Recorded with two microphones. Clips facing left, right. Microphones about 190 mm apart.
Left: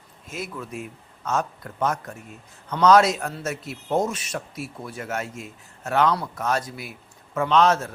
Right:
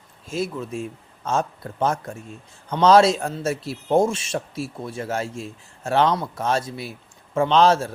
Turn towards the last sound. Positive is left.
turn(degrees=-30)  # may be behind; listen again after turning